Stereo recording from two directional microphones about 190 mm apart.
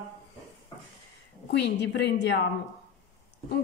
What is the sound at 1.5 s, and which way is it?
Speech, 65° left (ahead or behind).